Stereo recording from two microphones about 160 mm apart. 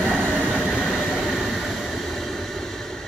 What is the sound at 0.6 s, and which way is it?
Train, centre (ahead or behind).